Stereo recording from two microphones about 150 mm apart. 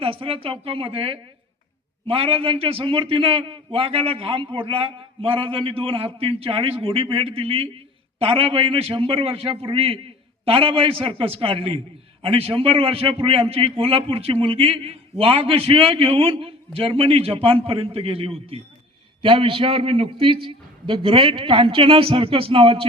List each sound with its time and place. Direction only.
0.0 s a man's voice: 40° right (ahead or behind)